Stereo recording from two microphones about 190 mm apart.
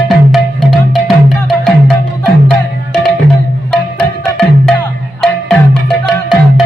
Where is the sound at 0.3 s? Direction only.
Centre (ahead or behind).